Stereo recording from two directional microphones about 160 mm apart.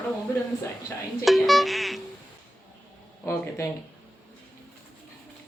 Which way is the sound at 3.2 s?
15° left (ahead or behind).